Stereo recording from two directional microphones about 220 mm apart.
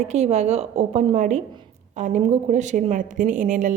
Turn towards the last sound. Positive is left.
turn(degrees=-35)  # may be behind; listen again after turning